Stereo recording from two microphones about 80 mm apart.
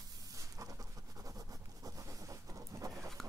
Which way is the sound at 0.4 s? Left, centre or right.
Right.